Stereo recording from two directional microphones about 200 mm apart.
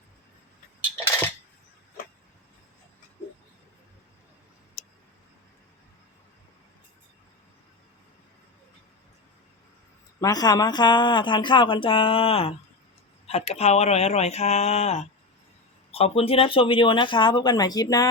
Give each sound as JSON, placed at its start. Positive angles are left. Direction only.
{"t": 10.2, "sound": "speech", "side_deg": 20}